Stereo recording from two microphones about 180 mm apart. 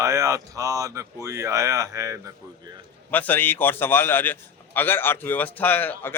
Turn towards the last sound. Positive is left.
turn(degrees=10)  # may be behind; listen again after turning